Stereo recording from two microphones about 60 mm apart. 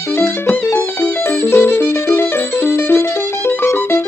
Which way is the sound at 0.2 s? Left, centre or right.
Left.